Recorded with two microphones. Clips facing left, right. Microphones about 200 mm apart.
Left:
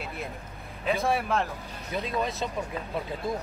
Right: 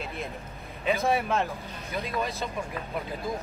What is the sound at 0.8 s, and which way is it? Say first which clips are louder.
Speech: right 1 dB; centre (ahead or behind).